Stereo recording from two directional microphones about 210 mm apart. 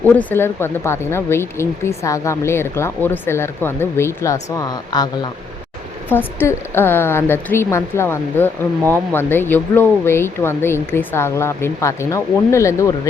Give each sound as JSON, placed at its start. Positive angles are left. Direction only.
{"t": 0.2, "sound": "a woman's voice", "side_deg": 10}